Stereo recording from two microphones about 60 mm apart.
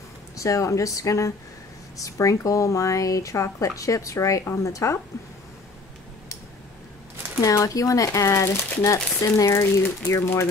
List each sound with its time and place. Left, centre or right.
0.4 s speech: left
7.4 s speech: left